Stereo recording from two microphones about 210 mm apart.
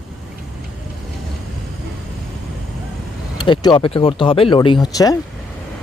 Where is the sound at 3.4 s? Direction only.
20° left (ahead or behind).